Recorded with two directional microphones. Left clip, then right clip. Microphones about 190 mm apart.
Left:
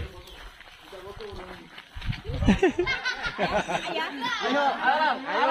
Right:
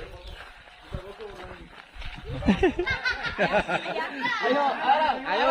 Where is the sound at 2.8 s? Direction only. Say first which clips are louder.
Even; 20° left (ahead or behind).